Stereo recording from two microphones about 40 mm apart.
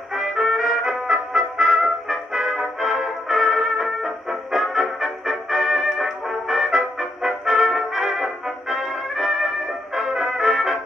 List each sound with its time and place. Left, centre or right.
0.1 s trumpet: centre
4.7 s music: centre
9.9 s brass instrument: centre